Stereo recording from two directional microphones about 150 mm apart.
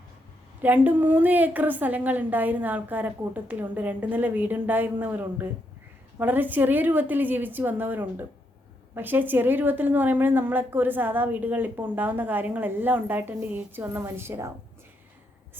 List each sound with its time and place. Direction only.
0.6 s a woman's voice: 10° right (ahead or behind)